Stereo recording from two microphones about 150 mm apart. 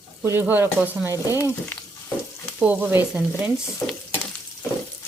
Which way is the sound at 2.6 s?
10° right (ahead or behind).